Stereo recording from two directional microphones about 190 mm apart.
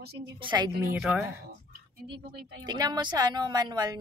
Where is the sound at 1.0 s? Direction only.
10° right (ahead or behind).